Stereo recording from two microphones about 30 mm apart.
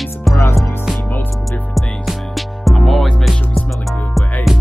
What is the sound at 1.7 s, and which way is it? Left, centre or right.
Music, centre.